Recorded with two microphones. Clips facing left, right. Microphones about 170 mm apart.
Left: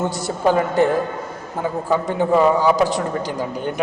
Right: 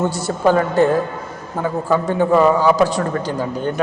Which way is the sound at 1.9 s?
15° left (ahead or behind).